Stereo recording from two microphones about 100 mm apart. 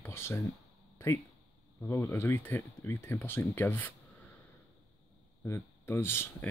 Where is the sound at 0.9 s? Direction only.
25° left (ahead or behind).